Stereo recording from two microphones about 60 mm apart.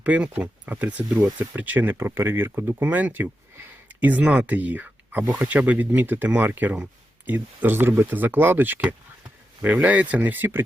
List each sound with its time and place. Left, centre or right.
0.0 s speech: right
2.0 s speech: right